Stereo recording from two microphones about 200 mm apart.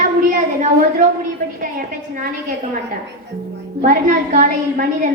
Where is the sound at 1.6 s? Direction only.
45° right (ahead or behind).